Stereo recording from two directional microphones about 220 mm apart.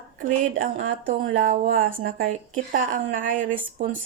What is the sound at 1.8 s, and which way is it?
Speech, 35° right (ahead or behind).